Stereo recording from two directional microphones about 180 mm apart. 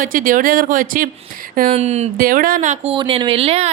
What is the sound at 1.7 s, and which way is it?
Speech, 35° right (ahead or behind).